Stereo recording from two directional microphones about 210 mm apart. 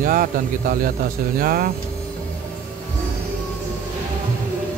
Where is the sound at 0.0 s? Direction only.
40° right (ahead or behind).